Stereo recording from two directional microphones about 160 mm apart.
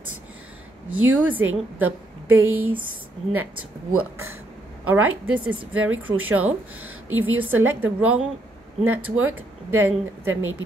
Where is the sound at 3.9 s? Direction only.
10° right (ahead or behind).